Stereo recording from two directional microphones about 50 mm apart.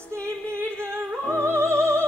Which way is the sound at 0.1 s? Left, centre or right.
Right.